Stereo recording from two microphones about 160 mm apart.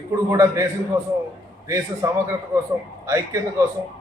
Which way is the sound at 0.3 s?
20° right (ahead or behind).